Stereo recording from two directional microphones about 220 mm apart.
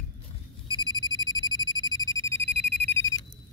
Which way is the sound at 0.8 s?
20° left (ahead or behind).